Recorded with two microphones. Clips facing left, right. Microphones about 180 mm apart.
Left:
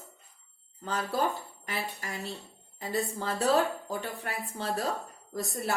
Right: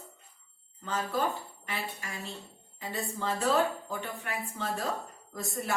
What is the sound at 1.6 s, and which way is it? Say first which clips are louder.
A woman's voice: left 2 dB; 40° left (ahead or behind).